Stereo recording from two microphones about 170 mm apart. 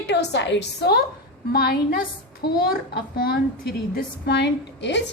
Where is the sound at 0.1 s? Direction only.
90° left.